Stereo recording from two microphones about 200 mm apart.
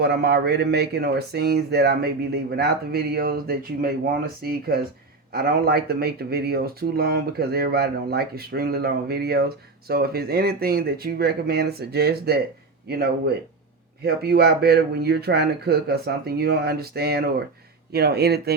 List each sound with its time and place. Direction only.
0.0 s speech: 55° right (ahead or behind)